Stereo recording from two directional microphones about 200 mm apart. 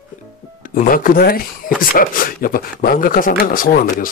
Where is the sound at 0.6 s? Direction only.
45° left (ahead or behind).